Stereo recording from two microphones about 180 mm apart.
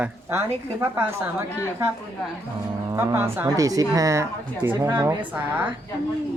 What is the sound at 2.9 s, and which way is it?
A woman's voice, 15° right (ahead or behind).